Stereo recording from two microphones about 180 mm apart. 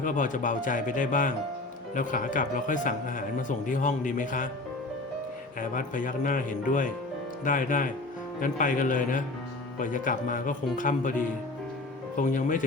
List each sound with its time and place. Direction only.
0.0 s a man's voice: 45° left (ahead or behind)
5.5 s a man's voice: 50° left (ahead or behind)